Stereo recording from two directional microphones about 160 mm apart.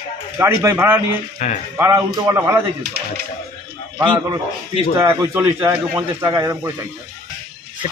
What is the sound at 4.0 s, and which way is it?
Speech, 30° right (ahead or behind).